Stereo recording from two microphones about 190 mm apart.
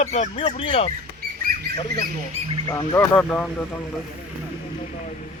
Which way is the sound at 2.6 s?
20° left (ahead or behind).